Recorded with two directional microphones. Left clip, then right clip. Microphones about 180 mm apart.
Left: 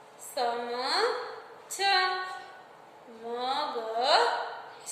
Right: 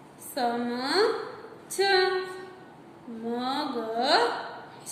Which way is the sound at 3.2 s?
15° right (ahead or behind).